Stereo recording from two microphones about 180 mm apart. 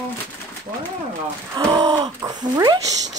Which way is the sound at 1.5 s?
20° right (ahead or behind).